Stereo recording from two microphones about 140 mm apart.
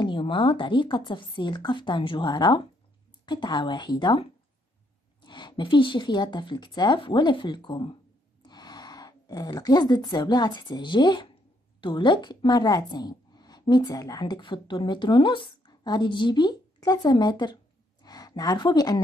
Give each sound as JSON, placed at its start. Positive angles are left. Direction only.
{"t": 0.0, "sound": "a woman's voice", "side_deg": 35}